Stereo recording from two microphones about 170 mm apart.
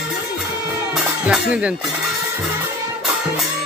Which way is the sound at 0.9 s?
5° right (ahead or behind).